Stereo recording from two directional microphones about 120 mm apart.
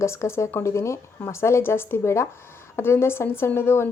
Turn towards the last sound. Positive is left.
turn(degrees=20)  # may be behind; listen again after turning